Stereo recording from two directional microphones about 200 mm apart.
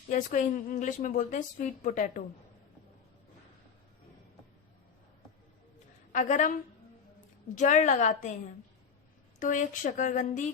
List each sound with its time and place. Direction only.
0.1 s a woman's voice: 40° left (ahead or behind)
6.1 s a woman's voice: 40° left (ahead or behind)
7.5 s a woman's voice: 40° left (ahead or behind)
9.4 s a woman's voice: 40° left (ahead or behind)